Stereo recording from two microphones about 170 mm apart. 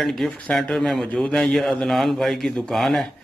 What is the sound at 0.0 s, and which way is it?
A man's voice, centre (ahead or behind).